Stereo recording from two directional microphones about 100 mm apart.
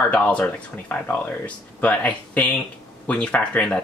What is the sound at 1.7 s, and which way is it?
Speech, 15° left (ahead or behind).